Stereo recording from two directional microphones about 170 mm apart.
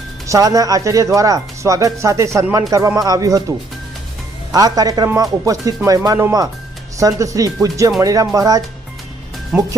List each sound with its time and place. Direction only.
0.3 s speech: 20° right (ahead or behind)
4.5 s speech: 20° right (ahead or behind)
9.5 s speech: 10° right (ahead or behind)